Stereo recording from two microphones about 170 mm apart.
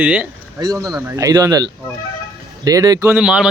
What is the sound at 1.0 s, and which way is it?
Speech, 20° right (ahead or behind).